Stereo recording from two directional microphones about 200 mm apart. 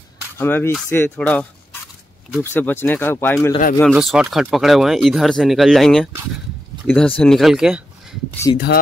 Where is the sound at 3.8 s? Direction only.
Centre (ahead or behind).